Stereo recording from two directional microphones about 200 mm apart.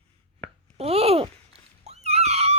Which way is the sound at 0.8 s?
30° right (ahead or behind).